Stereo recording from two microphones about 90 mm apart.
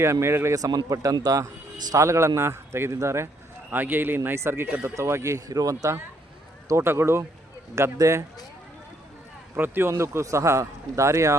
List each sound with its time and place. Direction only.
0.0 s a man's voice: 30° right (ahead or behind); by 1.5 s 45° right (ahead or behind)
1.9 s a man's voice: 35° right (ahead or behind)
3.7 s a man's voice: 20° right (ahead or behind)
4.9 s a man's voice: 35° right (ahead or behind)
6.7 s a man's voice: 30° right (ahead or behind)
9.6 s a man's voice: 25° right (ahead or behind)